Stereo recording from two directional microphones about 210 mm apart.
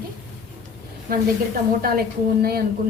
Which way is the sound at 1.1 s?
45° right (ahead or behind).